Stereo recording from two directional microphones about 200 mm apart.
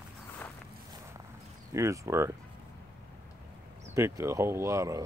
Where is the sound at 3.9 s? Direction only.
15° right (ahead or behind).